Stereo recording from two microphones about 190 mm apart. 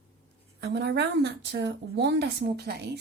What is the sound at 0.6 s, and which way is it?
A woman's voice, 60° right (ahead or behind).